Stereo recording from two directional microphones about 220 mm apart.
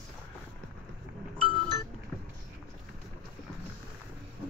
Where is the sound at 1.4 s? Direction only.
20° right (ahead or behind).